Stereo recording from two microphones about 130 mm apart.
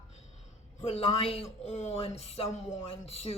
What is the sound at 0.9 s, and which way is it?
Speech, 50° left (ahead or behind).